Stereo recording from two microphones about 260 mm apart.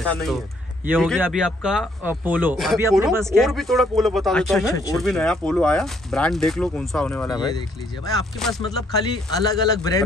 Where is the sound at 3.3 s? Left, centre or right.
Centre.